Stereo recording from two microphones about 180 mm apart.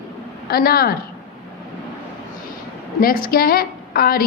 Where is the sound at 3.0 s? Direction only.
55° left (ahead or behind).